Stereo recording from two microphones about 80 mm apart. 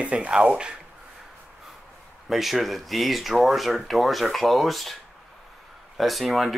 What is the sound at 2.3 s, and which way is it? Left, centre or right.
Speech, centre.